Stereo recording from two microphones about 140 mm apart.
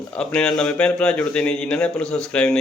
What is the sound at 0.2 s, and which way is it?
A man's voice, 5° left (ahead or behind).